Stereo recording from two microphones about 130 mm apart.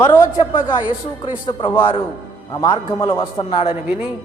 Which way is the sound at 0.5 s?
40° left (ahead or behind).